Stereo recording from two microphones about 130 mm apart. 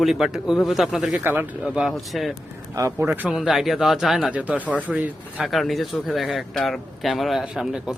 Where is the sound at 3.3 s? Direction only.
Centre (ahead or behind).